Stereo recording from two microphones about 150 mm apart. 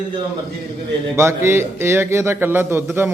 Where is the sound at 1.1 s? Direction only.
20° right (ahead or behind).